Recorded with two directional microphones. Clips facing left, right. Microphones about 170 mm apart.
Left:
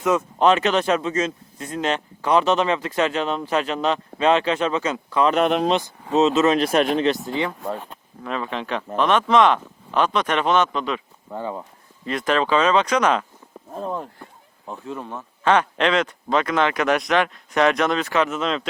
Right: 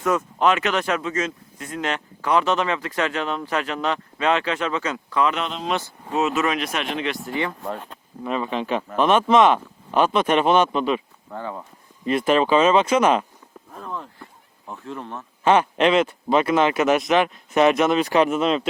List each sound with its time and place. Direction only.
0.0 s speech: 25° left (ahead or behind)
7.3 s speech: 15° left (ahead or behind)
8.2 s speech: 5° right (ahead or behind)
11.3 s speech: 15° left (ahead or behind)
12.2 s speech: 10° right (ahead or behind)
13.7 s speech: 30° left (ahead or behind)
14.7 s speech: 15° left (ahead or behind)
15.4 s speech: 10° right (ahead or behind)